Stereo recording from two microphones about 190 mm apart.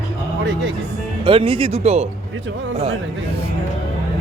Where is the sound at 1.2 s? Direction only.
30° right (ahead or behind).